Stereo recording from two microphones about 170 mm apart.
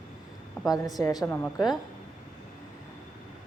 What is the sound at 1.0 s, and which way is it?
Speech, 20° left (ahead or behind).